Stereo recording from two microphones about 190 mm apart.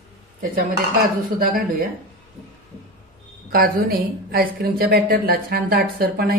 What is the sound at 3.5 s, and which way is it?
A woman's voice, 50° right (ahead or behind).